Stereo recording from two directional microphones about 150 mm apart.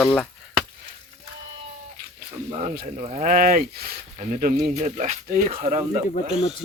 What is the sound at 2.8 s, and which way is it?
Speech, 50° right (ahead or behind).